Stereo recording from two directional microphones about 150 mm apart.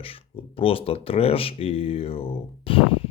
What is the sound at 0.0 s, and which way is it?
Speech, 40° left (ahead or behind).